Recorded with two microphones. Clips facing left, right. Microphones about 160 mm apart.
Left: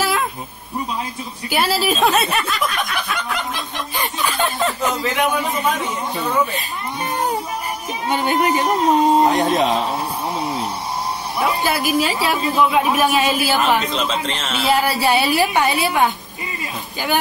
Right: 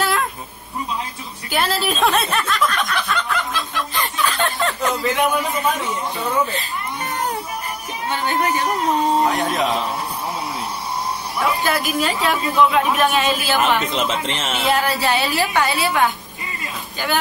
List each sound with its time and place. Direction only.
0.0 s a sound: 5° left (ahead or behind)
1.5 s snicker: 10° left (ahead or behind)
8.1 s speech: 15° left (ahead or behind)
11.3 s speech: 15° left (ahead or behind)
13.9 s speech: 20° right (ahead or behind)
14.7 s speech: 10° left (ahead or behind)